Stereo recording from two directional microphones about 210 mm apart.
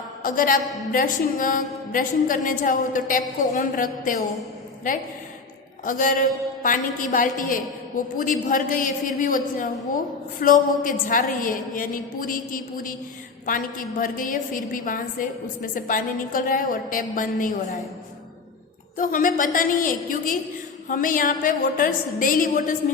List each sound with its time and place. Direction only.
0.2 s a man's voice: 40° left (ahead or behind)
5.8 s a woman's voice: 40° left (ahead or behind)
18.9 s a woman's voice: 40° left (ahead or behind)